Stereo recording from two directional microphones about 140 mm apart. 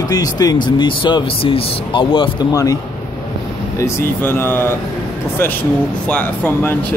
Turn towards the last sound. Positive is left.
turn(degrees=10)  # may be behind; listen again after turning